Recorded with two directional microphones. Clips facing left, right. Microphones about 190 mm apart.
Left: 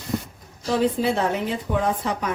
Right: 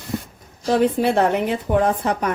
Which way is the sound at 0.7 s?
60° right (ahead or behind).